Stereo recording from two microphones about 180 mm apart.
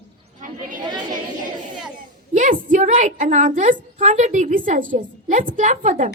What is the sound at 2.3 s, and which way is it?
A woman's voice, 45° right (ahead or behind).